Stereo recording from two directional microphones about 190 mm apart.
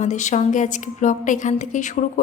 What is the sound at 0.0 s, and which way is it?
A woman's voice, 40° left (ahead or behind).